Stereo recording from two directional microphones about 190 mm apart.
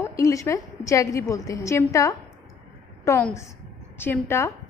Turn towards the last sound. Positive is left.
turn(degrees=10)  # may be behind; listen again after turning